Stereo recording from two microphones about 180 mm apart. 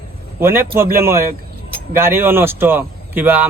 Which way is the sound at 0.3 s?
10° right (ahead or behind).